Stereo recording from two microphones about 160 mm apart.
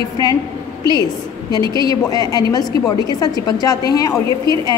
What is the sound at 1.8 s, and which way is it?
A woman's voice, 25° left (ahead or behind).